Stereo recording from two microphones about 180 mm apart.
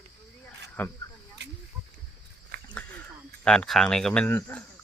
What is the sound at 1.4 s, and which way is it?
Speech, 70° right (ahead or behind).